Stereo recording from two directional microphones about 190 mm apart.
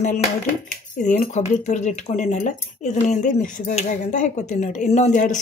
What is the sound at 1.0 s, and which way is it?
Speech, 40° left (ahead or behind).